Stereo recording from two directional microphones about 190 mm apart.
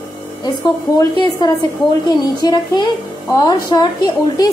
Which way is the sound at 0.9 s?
20° left (ahead or behind).